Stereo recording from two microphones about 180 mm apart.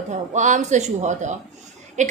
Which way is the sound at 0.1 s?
45° right (ahead or behind).